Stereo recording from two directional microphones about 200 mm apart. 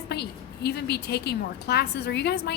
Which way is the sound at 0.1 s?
55° left (ahead or behind).